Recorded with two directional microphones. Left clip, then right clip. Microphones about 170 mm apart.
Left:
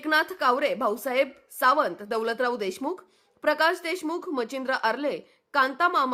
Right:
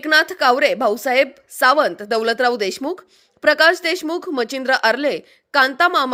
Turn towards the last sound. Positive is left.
turn(degrees=-25)  # may be behind; listen again after turning